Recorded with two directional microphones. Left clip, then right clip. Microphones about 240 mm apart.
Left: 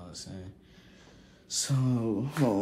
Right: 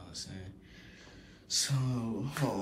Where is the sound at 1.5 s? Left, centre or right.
Centre.